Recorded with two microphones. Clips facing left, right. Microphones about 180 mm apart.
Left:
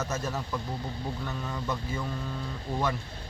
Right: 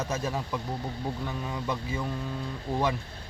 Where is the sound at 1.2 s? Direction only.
10° right (ahead or behind).